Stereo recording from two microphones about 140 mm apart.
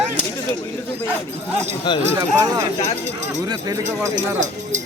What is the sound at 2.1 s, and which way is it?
Speech, 25° right (ahead or behind).